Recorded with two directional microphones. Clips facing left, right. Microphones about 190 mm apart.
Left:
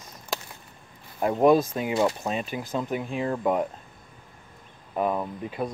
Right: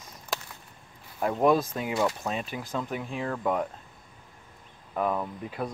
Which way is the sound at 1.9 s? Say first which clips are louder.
Left 3 dB; 25° left (ahead or behind).